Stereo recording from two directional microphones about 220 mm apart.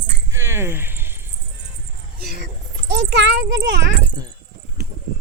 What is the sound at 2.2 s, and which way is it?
A child's voice, 45° right (ahead or behind).